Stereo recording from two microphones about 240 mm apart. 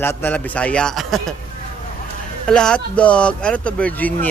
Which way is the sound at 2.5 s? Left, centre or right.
Centre.